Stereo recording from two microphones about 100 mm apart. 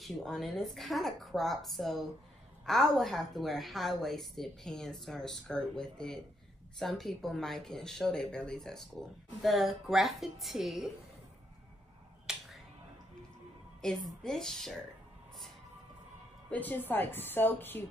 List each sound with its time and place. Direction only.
0.0 s a woman's voice: centre (ahead or behind)
12.3 s finger snapping: 5° right (ahead or behind)
13.7 s a woman's voice: 5° left (ahead or behind)
16.4 s a woman's voice: 15° left (ahead or behind)